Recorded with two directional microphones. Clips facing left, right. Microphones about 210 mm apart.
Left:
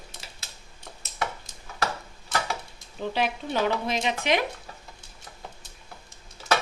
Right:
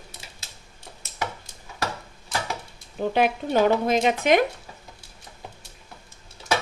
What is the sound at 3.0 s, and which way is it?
Speech, 50° right (ahead or behind).